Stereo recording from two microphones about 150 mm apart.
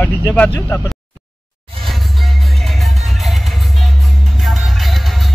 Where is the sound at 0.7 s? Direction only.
20° left (ahead or behind).